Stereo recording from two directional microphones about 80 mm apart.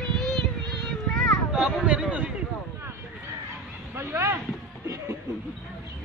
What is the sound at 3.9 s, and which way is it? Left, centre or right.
Speech, right.